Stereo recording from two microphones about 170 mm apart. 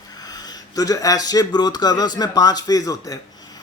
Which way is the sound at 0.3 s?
20° left (ahead or behind).